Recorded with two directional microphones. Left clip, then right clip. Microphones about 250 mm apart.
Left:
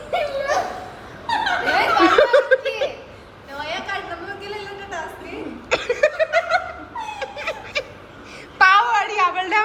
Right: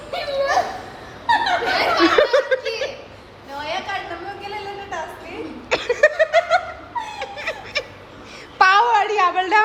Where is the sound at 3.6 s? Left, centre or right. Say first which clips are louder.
Right 1 dB; right.